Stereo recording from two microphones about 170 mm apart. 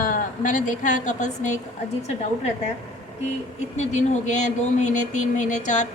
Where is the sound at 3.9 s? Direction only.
45° left (ahead or behind).